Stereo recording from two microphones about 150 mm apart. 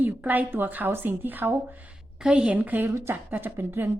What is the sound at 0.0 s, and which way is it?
Speech, 10° right (ahead or behind).